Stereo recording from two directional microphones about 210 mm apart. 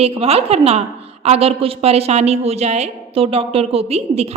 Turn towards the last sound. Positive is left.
turn(degrees=-30)  # may be behind; listen again after turning